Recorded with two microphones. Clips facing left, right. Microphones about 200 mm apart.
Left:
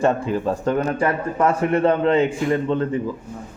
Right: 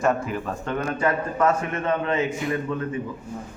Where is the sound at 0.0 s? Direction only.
30° left (ahead or behind).